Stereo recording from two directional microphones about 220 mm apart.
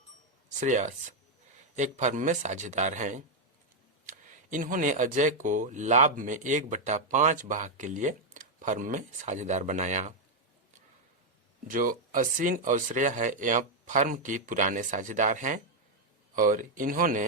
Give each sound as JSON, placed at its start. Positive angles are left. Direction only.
{"t": 0.6, "sound": "speech", "side_deg": -35}
{"t": 11.7, "sound": "speech", "side_deg": -40}